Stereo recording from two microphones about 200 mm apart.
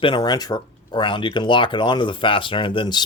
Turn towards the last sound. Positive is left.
turn(degrees=25)  # may be behind; listen again after turning